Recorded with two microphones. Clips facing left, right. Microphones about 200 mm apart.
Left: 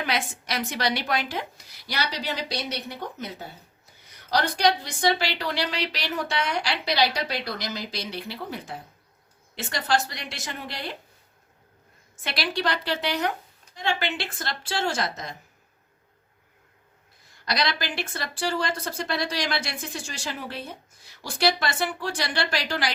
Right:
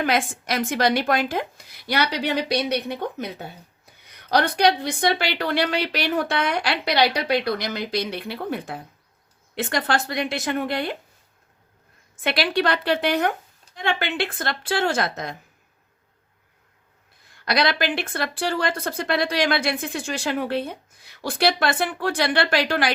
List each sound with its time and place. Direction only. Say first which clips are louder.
0.0 s a woman's voice: right 6 dB; 50° right (ahead or behind)
4.3 s speech: right 4 dB; 60° right (ahead or behind)
12.1 s speech: right 7 dB; 55° right (ahead or behind)
17.4 s speech: right 6 dB; 60° right (ahead or behind)